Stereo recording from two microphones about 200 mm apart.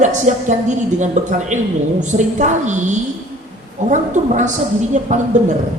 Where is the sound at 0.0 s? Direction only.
35° right (ahead or behind).